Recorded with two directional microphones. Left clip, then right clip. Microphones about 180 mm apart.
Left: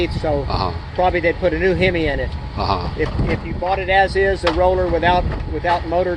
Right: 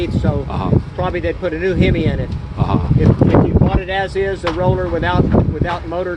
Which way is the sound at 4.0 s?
15° left (ahead or behind).